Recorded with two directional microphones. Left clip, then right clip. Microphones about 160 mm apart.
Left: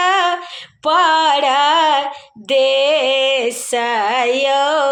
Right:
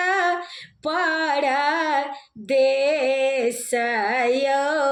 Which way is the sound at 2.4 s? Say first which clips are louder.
Left 5 dB; 45° left (ahead or behind).